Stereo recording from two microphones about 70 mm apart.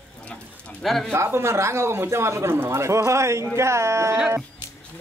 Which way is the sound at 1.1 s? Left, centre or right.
Right.